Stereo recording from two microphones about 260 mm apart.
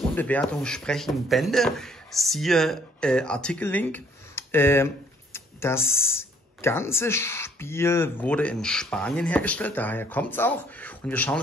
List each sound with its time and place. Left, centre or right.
0.1 s speech: centre
5.8 s speech: centre
6.1 s speech: centre